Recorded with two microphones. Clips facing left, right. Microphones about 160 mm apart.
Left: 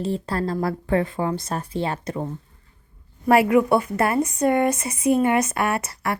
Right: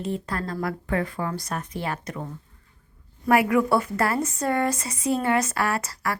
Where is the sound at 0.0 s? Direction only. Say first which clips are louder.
Left 4 dB; 30° left (ahead or behind).